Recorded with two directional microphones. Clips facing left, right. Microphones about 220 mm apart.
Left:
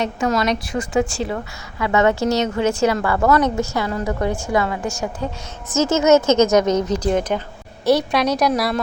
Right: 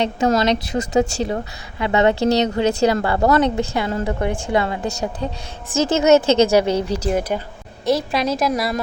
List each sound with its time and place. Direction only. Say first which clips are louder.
0.0 s speech: right 2 dB; 30° right (ahead or behind)
0.8 s a woman's voice: right 1 dB; 40° right (ahead or behind)
6.9 s a woman's voice: left 1 dB; 10° right (ahead or behind)